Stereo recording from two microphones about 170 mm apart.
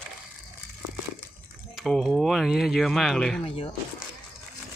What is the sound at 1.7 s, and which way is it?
Speech, centre (ahead or behind).